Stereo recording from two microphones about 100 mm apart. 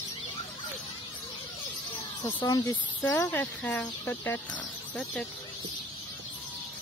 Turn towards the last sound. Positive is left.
turn(degrees=15)  # may be behind; listen again after turning